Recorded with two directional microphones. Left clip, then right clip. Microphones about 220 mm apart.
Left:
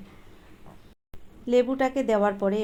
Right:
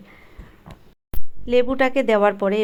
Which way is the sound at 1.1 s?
30° right (ahead or behind).